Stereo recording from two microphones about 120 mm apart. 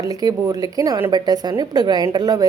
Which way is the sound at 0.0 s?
30° right (ahead or behind).